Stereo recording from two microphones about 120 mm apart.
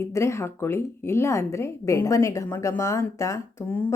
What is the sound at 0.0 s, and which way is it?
Speech, 25° left (ahead or behind).